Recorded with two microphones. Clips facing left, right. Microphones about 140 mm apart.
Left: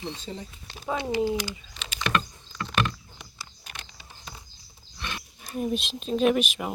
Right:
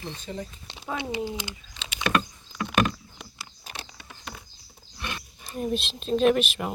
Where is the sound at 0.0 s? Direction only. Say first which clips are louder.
Even; 20° left (ahead or behind).